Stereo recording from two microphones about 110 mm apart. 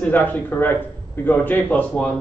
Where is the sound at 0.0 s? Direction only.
15° left (ahead or behind).